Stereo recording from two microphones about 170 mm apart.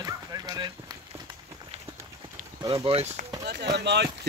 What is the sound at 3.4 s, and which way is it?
Speech, 80° right.